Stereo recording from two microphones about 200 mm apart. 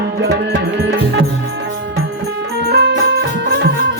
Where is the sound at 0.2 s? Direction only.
60° right (ahead or behind).